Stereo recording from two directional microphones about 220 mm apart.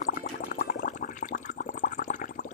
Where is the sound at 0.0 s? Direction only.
40° left (ahead or behind).